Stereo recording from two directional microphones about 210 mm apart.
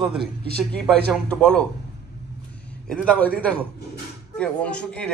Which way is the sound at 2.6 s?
5° left (ahead or behind).